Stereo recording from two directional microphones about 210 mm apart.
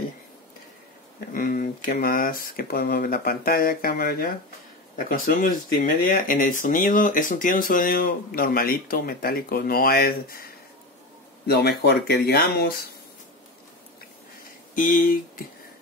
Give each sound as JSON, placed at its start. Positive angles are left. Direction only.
{"t": 1.3, "sound": "speech", "side_deg": 40}
{"t": 14.8, "sound": "speech", "side_deg": 40}